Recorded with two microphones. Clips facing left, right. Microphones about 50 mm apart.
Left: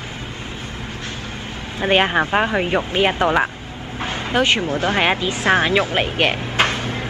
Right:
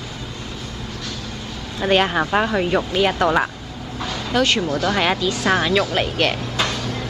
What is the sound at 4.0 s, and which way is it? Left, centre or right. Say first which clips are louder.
Speech: left 1 dB; left.